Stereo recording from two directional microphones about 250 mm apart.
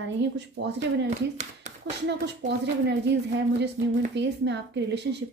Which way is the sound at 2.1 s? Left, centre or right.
Right.